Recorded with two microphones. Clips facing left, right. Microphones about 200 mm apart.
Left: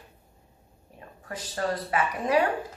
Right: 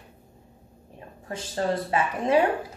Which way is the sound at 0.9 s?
25° right (ahead or behind).